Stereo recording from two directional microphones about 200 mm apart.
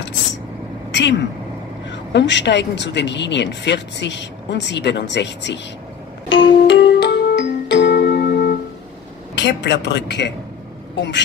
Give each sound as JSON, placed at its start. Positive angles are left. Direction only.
{"t": 1.9, "sound": "a woman's voice", "side_deg": 60}
{"t": 6.2, "sound": "music", "side_deg": 65}
{"t": 9.3, "sound": "a woman's voice", "side_deg": 60}